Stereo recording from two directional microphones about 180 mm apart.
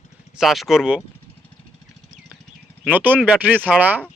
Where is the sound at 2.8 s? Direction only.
10° right (ahead or behind).